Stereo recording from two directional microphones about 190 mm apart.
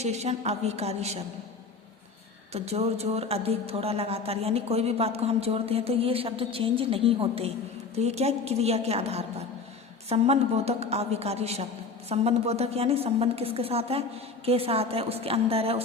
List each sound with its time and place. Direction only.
0.0 s a woman's voice: 35° right (ahead or behind)
2.5 s a woman's voice: 35° right (ahead or behind)